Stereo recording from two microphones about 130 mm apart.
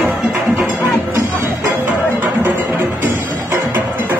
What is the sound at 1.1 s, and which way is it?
Music, 20° right (ahead or behind).